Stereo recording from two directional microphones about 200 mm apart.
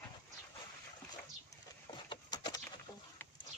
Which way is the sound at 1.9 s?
20° left (ahead or behind).